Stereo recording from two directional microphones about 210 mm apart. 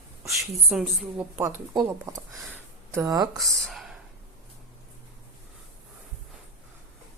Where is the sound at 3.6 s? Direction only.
Centre (ahead or behind).